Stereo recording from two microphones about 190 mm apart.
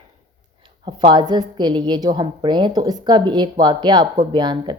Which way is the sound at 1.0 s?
25° right (ahead or behind).